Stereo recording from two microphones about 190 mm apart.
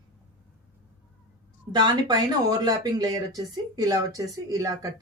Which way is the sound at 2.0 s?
20° right (ahead or behind).